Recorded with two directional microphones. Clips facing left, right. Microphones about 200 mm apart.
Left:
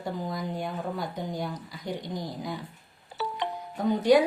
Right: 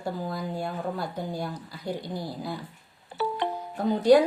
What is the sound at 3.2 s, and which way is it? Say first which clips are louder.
Music: right 5 dB; 55° right (ahead or behind).